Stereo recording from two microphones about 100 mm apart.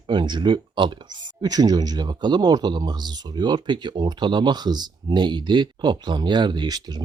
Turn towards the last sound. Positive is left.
turn(degrees=-45)  # may be behind; listen again after turning